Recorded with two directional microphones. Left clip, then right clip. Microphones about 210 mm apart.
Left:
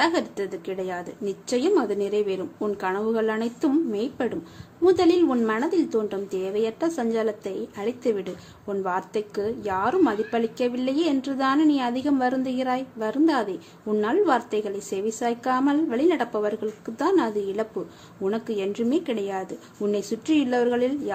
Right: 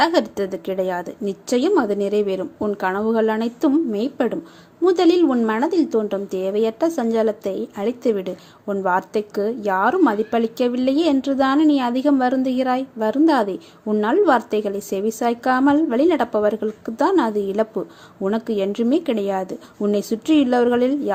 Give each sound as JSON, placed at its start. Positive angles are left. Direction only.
{"t": 0.0, "sound": "a woman's voice", "side_deg": -25}